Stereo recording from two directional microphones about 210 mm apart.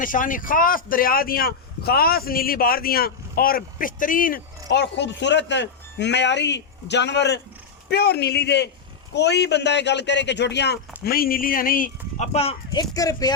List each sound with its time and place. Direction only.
0.0 s speech: 40° left (ahead or behind); by 13.3 s 15° left (ahead or behind)